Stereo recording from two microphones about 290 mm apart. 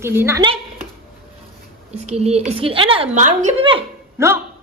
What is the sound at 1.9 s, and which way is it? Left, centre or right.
A woman's voice, right.